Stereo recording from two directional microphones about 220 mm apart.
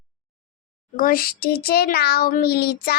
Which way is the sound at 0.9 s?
40° left (ahead or behind).